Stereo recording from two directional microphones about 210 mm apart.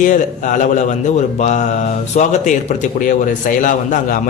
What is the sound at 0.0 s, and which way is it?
Speech, 40° left (ahead or behind).